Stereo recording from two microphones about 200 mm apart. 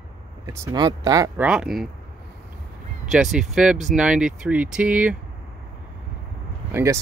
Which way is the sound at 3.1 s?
Centre (ahead or behind).